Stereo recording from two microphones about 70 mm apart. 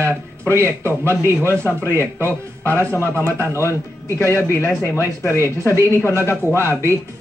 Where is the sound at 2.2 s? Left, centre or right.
Left.